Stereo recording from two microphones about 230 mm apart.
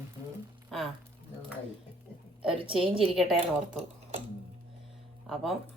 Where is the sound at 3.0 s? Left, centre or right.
Centre.